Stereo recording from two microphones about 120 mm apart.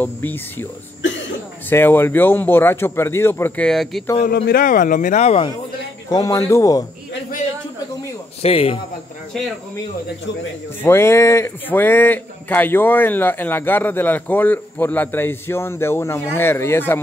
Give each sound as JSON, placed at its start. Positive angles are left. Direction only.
{"t": 0.0, "sound": "speech", "side_deg": 15}
{"t": 1.7, "sound": "speech", "side_deg": 15}
{"t": 3.6, "sound": "speech", "side_deg": 0}
{"t": 4.2, "sound": "a man's voice", "side_deg": 90}
{"t": 6.0, "sound": "speech", "side_deg": 30}
{"t": 8.4, "sound": "a man's voice", "side_deg": 55}
{"t": 10.8, "sound": "speech", "side_deg": 20}